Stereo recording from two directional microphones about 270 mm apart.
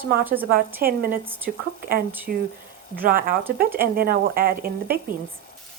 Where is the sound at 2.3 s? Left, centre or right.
Right.